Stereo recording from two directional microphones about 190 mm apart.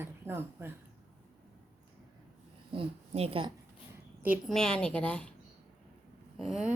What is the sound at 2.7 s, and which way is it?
Speech, 30° right (ahead or behind).